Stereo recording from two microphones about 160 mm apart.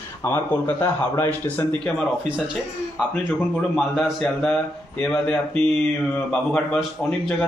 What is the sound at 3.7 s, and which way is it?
Speech, centre (ahead or behind).